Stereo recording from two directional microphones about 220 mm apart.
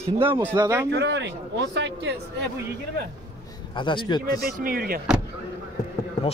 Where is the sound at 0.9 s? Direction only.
50° right (ahead or behind).